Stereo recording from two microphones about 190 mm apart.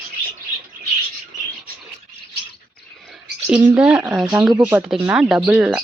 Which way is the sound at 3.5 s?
5° right (ahead or behind).